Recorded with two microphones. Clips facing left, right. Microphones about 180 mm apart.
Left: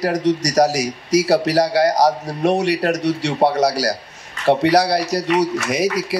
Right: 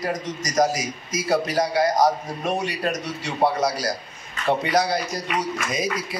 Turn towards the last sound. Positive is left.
turn(degrees=75)  # may be behind; listen again after turning